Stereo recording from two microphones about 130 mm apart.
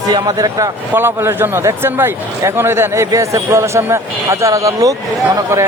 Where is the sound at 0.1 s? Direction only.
30° right (ahead or behind).